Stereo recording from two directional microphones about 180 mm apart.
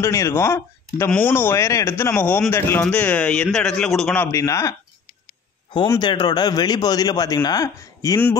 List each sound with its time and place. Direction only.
0.0 s speech: 15° left (ahead or behind)
5.9 s a man's voice: 25° left (ahead or behind)